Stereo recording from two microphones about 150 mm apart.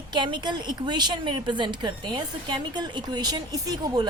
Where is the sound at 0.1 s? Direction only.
30° right (ahead or behind).